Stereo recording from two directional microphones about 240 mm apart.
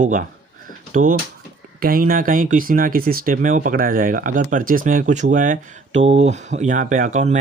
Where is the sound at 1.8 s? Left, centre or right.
Right.